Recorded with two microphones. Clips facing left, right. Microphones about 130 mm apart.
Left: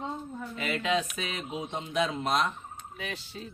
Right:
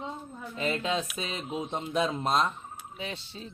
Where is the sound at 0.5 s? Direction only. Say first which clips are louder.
Right 1 dB; 30° right (ahead or behind).